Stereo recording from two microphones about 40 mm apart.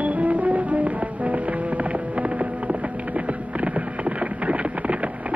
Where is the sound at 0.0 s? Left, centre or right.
Right.